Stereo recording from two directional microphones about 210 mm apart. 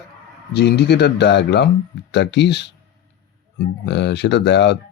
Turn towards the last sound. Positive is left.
turn(degrees=55)  # may be behind; listen again after turning